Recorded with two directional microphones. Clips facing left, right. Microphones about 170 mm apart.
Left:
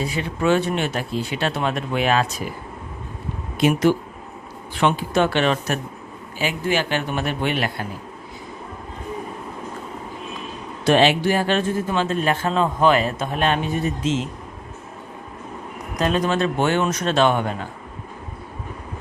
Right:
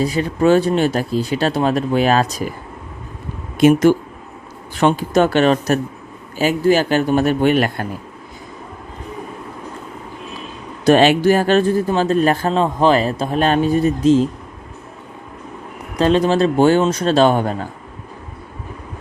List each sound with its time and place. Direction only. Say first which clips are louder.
0.0 s speech: right 7 dB; 40° right (ahead or behind)
3.6 s speech: right 6 dB; 45° right (ahead or behind)
10.8 s speech: right 5 dB; 45° right (ahead or behind)
16.0 s speech: right 6 dB; 30° right (ahead or behind)